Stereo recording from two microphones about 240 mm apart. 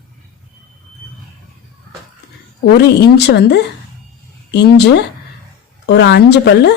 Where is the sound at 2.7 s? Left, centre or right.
Left.